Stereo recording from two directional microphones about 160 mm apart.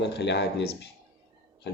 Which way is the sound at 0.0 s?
90° left.